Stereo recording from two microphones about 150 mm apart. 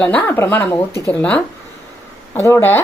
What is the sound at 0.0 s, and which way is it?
Speech, 10° left (ahead or behind).